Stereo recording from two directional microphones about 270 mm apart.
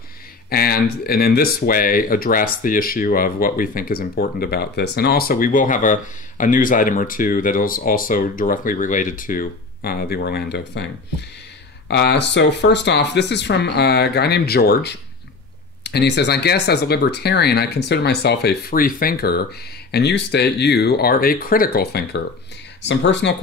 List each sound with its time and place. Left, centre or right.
0.5 s speech: left
11.9 s speech: left